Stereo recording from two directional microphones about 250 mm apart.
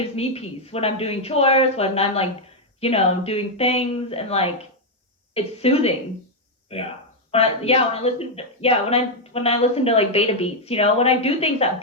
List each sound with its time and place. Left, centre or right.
0.2 s a woman's voice: left